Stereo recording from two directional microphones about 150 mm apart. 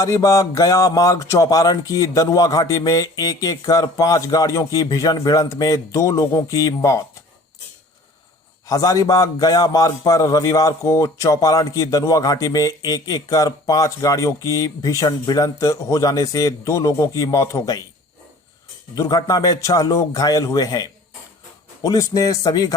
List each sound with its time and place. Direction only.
0.0 s a man's voice: 20° left (ahead or behind)
8.6 s a man's voice: 20° left (ahead or behind)
18.9 s a man's voice: 25° left (ahead or behind)